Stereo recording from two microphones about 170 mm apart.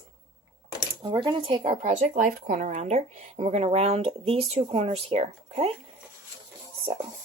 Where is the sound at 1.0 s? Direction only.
25° right (ahead or behind).